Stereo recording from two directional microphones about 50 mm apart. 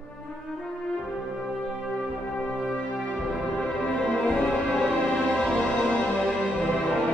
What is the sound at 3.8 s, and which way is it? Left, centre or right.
Music, left.